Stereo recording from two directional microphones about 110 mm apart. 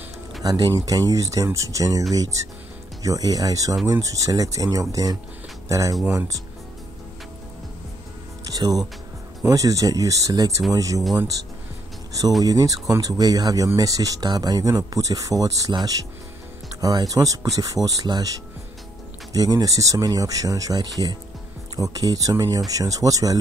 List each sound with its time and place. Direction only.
0.4 s speech: 35° right (ahead or behind)
8.5 s music: 35° right (ahead or behind)
9.4 s speech: 30° right (ahead or behind)
12.4 s speech: 35° right (ahead or behind)